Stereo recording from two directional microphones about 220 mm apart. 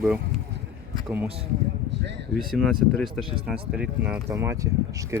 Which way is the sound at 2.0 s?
50° right (ahead or behind).